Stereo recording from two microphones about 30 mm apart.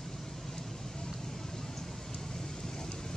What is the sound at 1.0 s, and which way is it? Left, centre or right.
Vehicle, centre.